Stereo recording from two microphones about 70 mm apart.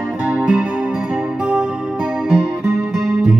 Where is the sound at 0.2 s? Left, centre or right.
Centre.